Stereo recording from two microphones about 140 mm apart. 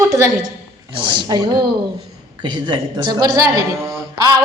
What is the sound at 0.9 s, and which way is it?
A woman's voice, 35° right (ahead or behind).